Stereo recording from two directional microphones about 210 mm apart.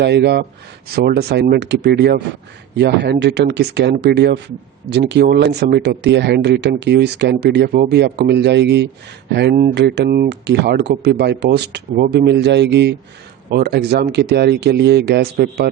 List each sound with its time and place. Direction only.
0.0 s speech: 50° right (ahead or behind)